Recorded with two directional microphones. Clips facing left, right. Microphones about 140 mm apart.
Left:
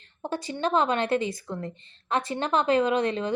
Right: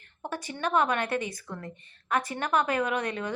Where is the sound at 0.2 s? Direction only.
25° left (ahead or behind).